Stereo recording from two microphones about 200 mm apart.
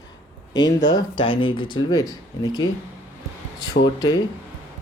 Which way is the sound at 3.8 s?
20° left (ahead or behind).